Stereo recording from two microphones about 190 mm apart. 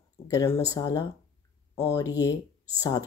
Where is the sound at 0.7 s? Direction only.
20° left (ahead or behind).